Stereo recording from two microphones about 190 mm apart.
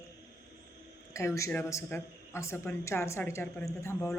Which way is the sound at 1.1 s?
15° left (ahead or behind).